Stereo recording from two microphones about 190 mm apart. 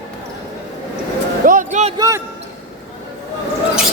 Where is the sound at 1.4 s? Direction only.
45° right (ahead or behind).